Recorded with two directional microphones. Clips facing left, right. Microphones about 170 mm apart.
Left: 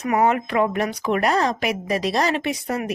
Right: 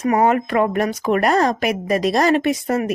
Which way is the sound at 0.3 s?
45° right (ahead or behind).